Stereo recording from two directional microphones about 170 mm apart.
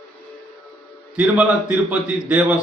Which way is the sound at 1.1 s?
5° right (ahead or behind).